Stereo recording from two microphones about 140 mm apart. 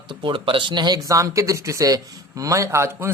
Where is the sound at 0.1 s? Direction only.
35° right (ahead or behind).